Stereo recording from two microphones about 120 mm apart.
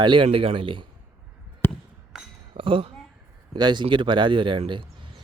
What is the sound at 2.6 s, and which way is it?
Speech, 50° right (ahead or behind).